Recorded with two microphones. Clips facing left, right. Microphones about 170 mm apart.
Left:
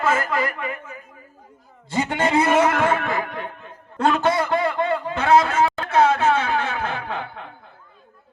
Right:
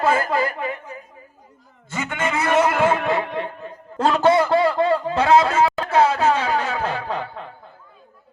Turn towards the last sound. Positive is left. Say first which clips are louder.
# right 2 dB
turn(degrees=-35)  # may be behind; listen again after turning